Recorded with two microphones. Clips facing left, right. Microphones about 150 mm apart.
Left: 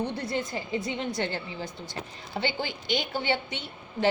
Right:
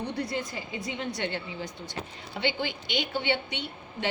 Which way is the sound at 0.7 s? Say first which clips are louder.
Left 4 dB; 35° left (ahead or behind).